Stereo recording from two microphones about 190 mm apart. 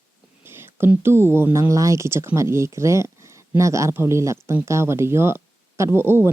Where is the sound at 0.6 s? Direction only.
10° right (ahead or behind).